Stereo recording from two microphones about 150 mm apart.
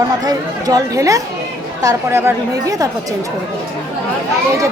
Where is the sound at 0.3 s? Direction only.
25° right (ahead or behind).